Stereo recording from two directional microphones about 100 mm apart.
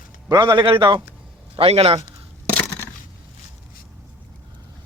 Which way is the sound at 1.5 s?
80° right.